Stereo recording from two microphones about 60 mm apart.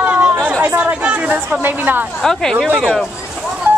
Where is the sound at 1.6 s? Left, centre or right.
Right.